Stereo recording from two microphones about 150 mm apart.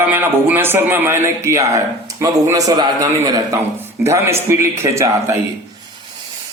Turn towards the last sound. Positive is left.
turn(degrees=-20)  # may be behind; listen again after turning